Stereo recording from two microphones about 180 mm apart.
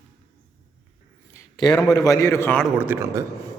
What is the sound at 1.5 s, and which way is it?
A man's voice, 25° left (ahead or behind).